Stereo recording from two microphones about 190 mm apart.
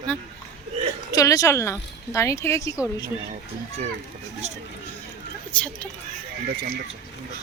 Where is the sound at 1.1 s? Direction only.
15° left (ahead or behind).